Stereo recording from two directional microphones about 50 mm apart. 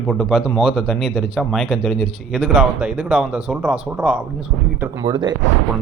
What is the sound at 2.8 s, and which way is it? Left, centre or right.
Speech, centre.